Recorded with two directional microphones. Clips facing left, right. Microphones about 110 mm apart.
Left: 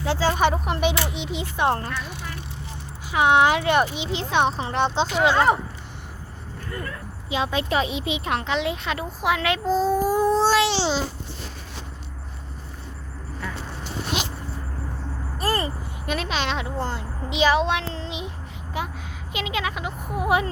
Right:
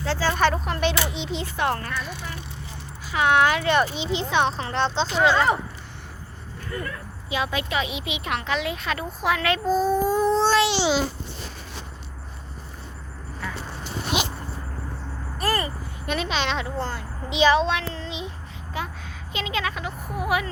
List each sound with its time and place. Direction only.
0.0 s speech: 20° left (ahead or behind)
1.5 s a woman's voice: 25° left (ahead or behind)
4.1 s a woman's voice: centre (ahead or behind)
7.3 s speech: 25° left (ahead or behind)
10.1 s a sound: 10° left (ahead or behind); by 11.0 s 10° right (ahead or behind)
15.4 s a sound: 25° left (ahead or behind)
16.0 s speech: centre (ahead or behind)
17.2 s speech: 5° left (ahead or behind)
17.7 s child singing: 20° left (ahead or behind)
18.8 s a sound: 15° left (ahead or behind)
19.3 s a woman's voice: 10° left (ahead or behind); by 20.5 s 25° left (ahead or behind)